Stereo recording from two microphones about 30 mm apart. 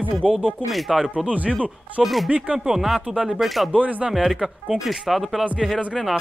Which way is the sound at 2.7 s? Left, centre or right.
Centre.